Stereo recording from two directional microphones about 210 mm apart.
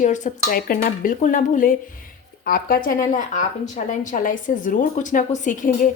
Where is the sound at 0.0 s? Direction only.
35° left (ahead or behind).